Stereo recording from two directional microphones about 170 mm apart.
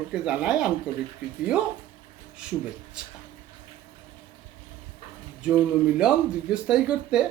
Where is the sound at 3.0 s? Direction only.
5° right (ahead or behind).